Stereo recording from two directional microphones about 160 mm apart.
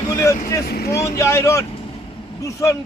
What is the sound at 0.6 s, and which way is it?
Speech, 75° left (ahead or behind).